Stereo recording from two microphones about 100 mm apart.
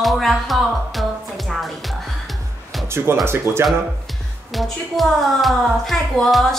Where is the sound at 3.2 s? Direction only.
25° right (ahead or behind).